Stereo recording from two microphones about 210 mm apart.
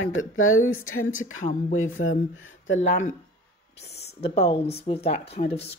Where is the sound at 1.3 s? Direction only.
35° left (ahead or behind).